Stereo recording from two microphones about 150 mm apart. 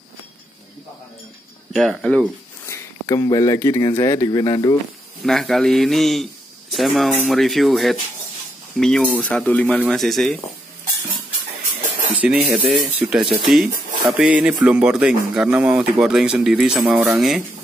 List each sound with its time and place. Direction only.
1.7 s speech: centre (ahead or behind)
2.7 s speech: 20° left (ahead or behind)
5.2 s speech: centre (ahead or behind)
12.2 s speech: 10° right (ahead or behind)